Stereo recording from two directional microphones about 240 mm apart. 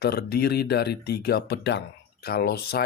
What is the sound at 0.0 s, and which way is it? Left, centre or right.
Speech, left.